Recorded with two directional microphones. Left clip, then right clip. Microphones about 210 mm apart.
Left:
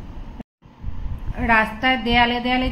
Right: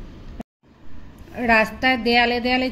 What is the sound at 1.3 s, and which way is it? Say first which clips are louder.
A woman's voice: even; 40° right (ahead or behind).